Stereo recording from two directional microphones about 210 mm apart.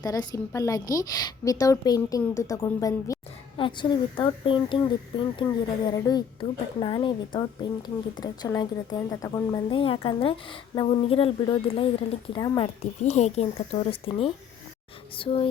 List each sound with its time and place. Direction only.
0.0 s a woman's voice: 20° left (ahead or behind)